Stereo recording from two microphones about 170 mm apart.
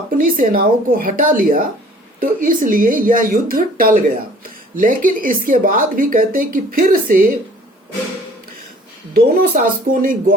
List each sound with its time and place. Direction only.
0.2 s speech: 55° right (ahead or behind)
9.1 s speech: 60° right (ahead or behind)